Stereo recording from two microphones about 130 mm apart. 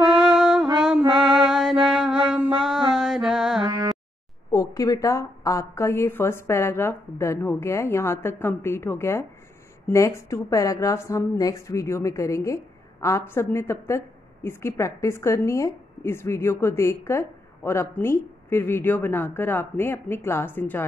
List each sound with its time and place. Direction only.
0.0 s music: 5° right (ahead or behind)
4.6 s a woman's voice: 25° left (ahead or behind)